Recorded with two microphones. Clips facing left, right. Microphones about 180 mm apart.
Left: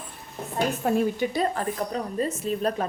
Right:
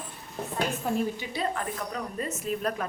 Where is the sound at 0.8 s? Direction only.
50° left (ahead or behind).